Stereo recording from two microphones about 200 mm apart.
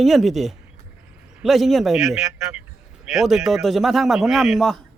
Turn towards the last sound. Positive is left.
turn(degrees=0)  # may be behind; listen again after turning